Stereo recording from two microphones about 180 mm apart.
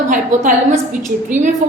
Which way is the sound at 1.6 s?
45° right (ahead or behind).